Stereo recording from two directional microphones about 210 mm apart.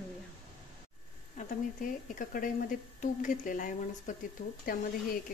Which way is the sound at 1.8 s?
40° left (ahead or behind).